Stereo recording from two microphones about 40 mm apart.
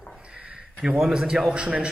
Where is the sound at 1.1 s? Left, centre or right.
Centre.